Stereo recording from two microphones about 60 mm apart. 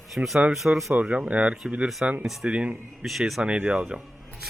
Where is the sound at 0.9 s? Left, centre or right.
Right.